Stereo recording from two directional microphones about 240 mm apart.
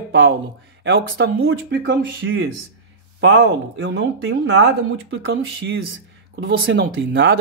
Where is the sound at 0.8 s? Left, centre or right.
Right.